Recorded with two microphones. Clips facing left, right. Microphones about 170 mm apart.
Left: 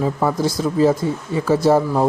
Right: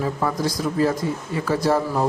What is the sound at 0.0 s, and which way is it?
Speech, 25° left (ahead or behind).